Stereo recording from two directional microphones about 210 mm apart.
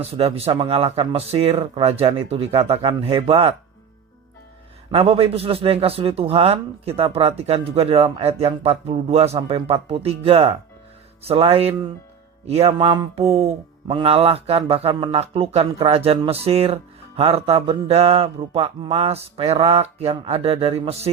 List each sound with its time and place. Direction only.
0.0 s mantra: 30° right (ahead or behind)
4.9 s mantra: 25° right (ahead or behind)